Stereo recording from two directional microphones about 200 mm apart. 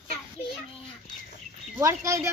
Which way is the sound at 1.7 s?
15° right (ahead or behind).